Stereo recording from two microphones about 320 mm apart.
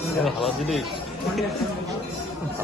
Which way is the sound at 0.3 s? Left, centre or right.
Centre.